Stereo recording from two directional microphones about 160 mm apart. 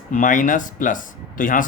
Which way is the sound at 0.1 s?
55° left (ahead or behind).